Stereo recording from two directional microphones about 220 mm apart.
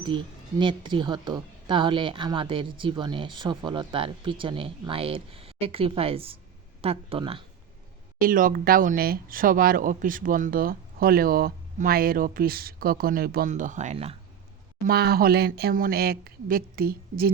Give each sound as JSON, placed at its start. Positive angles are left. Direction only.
{"t": 0.6, "sound": "a woman's voice", "side_deg": -20}
{"t": 8.2, "sound": "speech", "side_deg": -40}
{"t": 14.8, "sound": "speech", "side_deg": -45}